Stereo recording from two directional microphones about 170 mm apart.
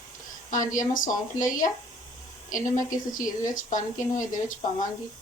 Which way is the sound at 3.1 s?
50° left (ahead or behind).